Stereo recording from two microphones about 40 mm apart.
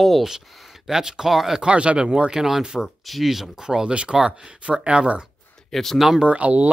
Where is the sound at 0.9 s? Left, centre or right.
Centre.